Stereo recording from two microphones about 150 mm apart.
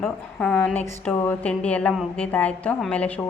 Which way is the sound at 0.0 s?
10° left (ahead or behind).